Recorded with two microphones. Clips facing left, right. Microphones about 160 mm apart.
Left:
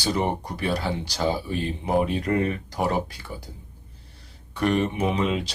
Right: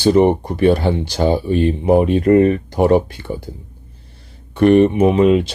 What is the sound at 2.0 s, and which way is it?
Speech, 55° right (ahead or behind).